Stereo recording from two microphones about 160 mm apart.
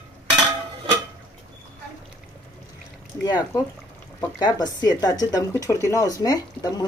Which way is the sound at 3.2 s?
25° left (ahead or behind).